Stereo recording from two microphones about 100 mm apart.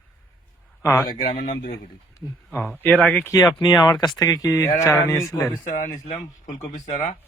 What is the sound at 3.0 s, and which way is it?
Speech, 15° left (ahead or behind).